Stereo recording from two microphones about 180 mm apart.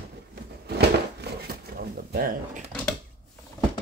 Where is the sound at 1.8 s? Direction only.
55° right (ahead or behind).